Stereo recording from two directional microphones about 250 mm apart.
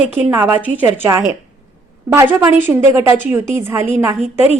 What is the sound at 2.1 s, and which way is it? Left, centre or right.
A woman's voice, centre.